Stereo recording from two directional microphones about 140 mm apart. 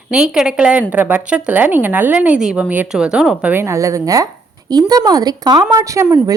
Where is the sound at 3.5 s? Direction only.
20° right (ahead or behind).